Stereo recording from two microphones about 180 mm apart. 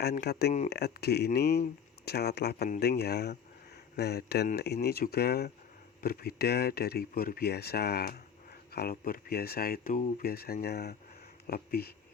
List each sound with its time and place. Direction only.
0.0 s speech: 65° left (ahead or behind)
2.6 s speech: 50° left (ahead or behind)